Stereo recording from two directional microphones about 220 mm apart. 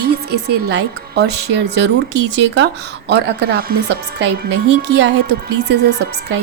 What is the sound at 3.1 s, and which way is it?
Speech, 45° right (ahead or behind).